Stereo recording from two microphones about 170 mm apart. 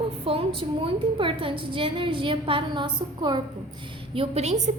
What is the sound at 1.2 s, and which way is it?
A woman's voice, 30° right (ahead or behind).